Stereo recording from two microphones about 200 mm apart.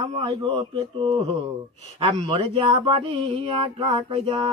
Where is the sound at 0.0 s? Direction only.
25° right (ahead or behind).